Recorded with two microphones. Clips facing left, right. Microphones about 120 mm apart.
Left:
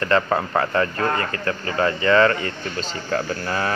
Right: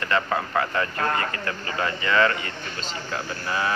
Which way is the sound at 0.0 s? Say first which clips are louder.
Left 5 dB; 35° left (ahead or behind).